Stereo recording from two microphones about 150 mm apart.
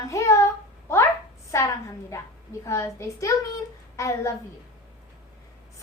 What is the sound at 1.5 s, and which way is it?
A woman's voice, 20° left (ahead or behind).